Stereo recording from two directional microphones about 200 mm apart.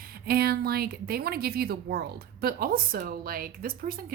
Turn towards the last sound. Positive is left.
turn(degrees=-45)  # may be behind; listen again after turning